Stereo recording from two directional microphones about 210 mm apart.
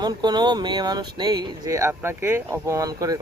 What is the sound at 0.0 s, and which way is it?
Speech, 20° right (ahead or behind).